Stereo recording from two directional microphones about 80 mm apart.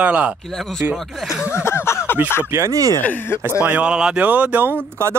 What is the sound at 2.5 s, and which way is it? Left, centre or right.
Speech, right.